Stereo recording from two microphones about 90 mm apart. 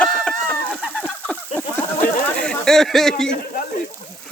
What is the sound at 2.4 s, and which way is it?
Speech, 5° left (ahead or behind).